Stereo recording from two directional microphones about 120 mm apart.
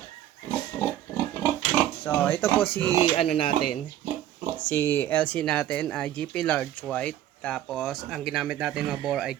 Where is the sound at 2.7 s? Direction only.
35° right (ahead or behind).